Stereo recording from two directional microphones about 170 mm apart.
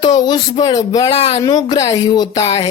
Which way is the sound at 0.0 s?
25° left (ahead or behind).